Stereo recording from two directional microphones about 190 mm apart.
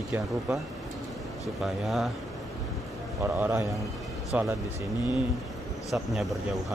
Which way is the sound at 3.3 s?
10° right (ahead or behind).